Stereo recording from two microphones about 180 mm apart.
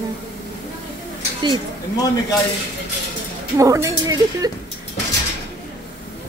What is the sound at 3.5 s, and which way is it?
Speech, 15° right (ahead or behind).